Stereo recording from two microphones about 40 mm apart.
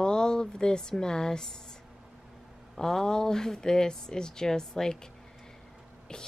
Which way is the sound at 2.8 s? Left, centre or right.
Centre.